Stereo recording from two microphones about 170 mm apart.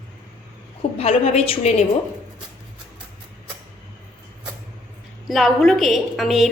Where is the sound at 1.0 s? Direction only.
35° left (ahead or behind).